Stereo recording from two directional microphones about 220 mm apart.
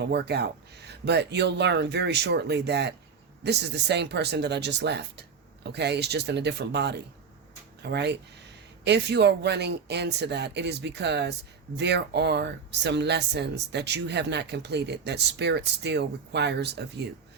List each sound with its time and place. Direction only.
0.0 s speech: 50° right (ahead or behind)